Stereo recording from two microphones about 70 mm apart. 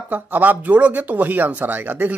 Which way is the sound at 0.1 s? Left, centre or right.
Right.